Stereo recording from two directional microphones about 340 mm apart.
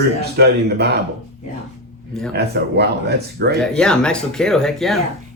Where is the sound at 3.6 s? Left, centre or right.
Centre.